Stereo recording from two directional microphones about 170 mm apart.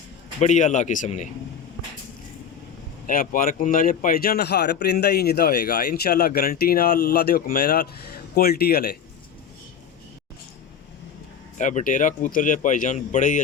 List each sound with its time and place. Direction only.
0.3 s speech: 45° left (ahead or behind)
3.1 s speech: 55° left (ahead or behind)
11.5 s speech: 45° left (ahead or behind)